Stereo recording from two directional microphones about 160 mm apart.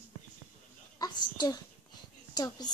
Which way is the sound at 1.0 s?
25° left (ahead or behind).